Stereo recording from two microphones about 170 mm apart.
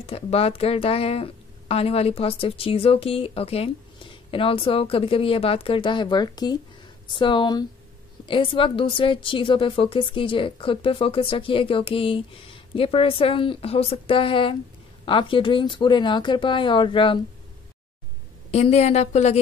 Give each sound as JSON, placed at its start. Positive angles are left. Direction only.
{"t": 0.0, "sound": "a woman's voice", "side_deg": 35}
{"t": 18.5, "sound": "a woman's voice", "side_deg": 40}